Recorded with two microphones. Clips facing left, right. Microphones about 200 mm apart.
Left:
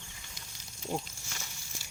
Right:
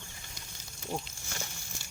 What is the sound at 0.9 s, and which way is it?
Wild animals, 15° left (ahead or behind).